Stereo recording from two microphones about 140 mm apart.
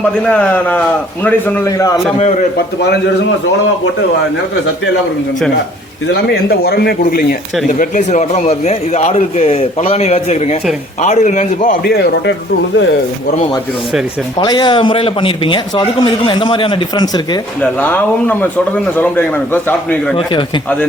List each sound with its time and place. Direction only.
0.3 s a man's voice: 10° left (ahead or behind)
6.5 s speech: 90° left
7.8 s a man's voice: 60° left (ahead or behind)
14.3 s a man's voice: 35° left (ahead or behind)
17.6 s a man's voice: 10° left (ahead or behind)